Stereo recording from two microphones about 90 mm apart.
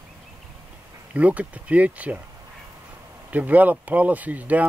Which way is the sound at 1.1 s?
15° right (ahead or behind).